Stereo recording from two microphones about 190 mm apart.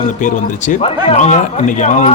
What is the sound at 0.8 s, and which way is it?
Speech, 35° left (ahead or behind).